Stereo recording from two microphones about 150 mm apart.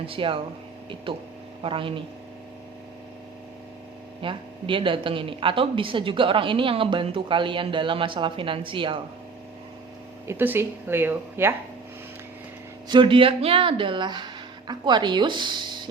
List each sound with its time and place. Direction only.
0.0 s a woman's voice: 35° right (ahead or behind)
1.6 s a woman's voice: 35° right (ahead or behind)
4.2 s a woman's voice: 35° right (ahead or behind)
10.2 s speech: 15° right (ahead or behind)
12.9 s a woman's voice: 35° right (ahead or behind)